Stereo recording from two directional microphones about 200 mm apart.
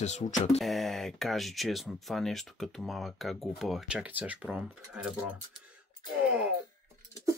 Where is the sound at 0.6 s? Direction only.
Centre (ahead or behind).